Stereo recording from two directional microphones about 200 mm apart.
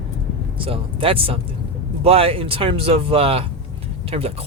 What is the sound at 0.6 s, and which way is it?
Speech, 25° right (ahead or behind).